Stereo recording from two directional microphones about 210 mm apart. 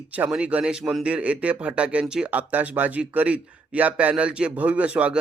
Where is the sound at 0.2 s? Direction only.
5° right (ahead or behind).